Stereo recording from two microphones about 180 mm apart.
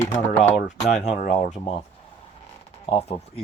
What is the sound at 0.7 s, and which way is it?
Speech, 40° left (ahead or behind).